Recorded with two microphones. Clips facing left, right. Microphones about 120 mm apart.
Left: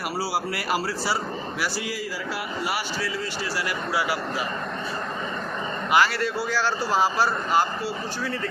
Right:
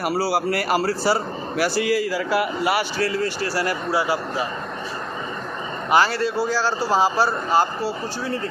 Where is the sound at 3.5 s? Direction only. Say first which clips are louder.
Right 2 dB; 40° right (ahead or behind).